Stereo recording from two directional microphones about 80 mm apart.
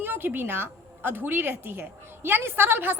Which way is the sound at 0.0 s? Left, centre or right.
Right.